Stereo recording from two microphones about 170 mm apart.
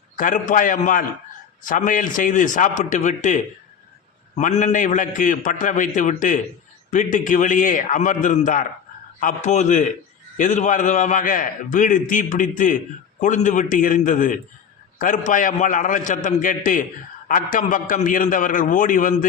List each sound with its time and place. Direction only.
0.2 s a man's voice: 50° left (ahead or behind)